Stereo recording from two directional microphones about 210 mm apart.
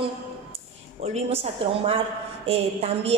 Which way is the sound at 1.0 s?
30° right (ahead or behind).